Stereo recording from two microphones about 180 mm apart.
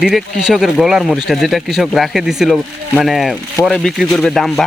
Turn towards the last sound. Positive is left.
turn(degrees=0)  # may be behind; listen again after turning